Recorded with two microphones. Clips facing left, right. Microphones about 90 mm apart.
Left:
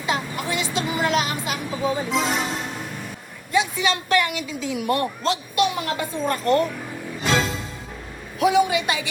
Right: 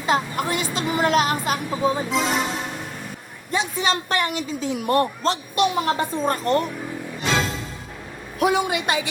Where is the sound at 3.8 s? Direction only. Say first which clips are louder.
Left 1 dB; 35° right (ahead or behind).